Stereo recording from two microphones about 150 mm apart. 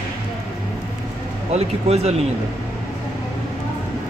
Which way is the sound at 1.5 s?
45° right (ahead or behind).